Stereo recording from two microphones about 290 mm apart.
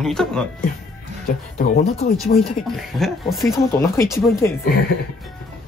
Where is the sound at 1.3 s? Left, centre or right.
Left.